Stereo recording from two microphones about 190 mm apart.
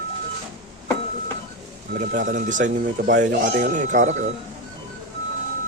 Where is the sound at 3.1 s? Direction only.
60° right (ahead or behind); by 4.1 s 40° right (ahead or behind).